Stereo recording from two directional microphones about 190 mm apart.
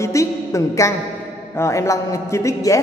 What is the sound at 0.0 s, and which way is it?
A woman's voice, 15° left (ahead or behind).